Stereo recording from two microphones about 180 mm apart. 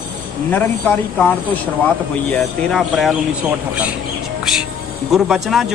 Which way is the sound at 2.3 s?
5° left (ahead or behind).